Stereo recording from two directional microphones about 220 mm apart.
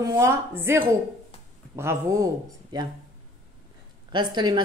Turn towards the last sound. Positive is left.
turn(degrees=-20)  # may be behind; listen again after turning